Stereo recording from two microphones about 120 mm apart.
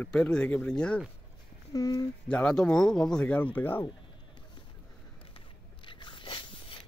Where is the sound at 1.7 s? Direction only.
35° left (ahead or behind).